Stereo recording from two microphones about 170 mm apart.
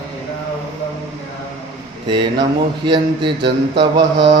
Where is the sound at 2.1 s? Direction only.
25° right (ahead or behind).